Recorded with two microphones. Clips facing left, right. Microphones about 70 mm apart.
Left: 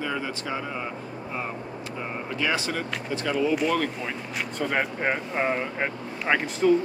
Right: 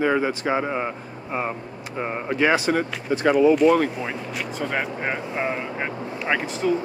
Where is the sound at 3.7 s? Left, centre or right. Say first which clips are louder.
Right 6 dB; centre.